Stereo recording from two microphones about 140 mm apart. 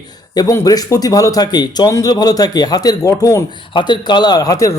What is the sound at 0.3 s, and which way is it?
Speech, 25° left (ahead or behind).